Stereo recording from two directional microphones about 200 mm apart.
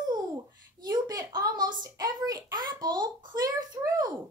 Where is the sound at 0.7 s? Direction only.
20° right (ahead or behind).